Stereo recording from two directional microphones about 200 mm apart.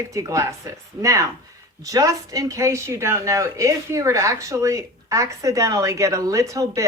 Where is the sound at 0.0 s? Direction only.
15° right (ahead or behind).